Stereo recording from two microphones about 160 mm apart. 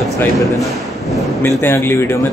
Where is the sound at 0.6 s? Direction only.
Centre (ahead or behind).